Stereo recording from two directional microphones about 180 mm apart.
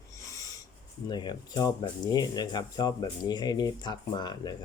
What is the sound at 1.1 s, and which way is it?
Speech, 25° left (ahead or behind).